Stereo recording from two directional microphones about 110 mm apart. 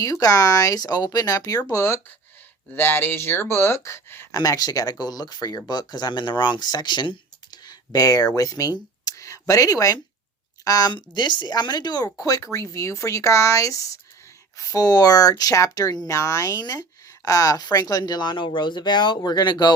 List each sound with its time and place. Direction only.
0.0 s speech: 35° left (ahead or behind)
4.4 s speech: 35° left (ahead or behind)